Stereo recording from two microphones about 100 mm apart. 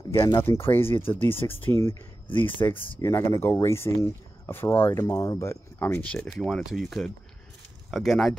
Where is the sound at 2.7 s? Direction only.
60° left (ahead or behind).